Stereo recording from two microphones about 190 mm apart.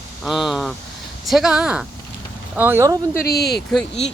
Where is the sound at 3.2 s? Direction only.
55° left (ahead or behind).